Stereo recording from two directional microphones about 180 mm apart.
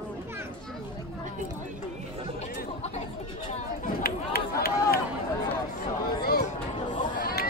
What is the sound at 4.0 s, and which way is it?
Run, 60° left (ahead or behind).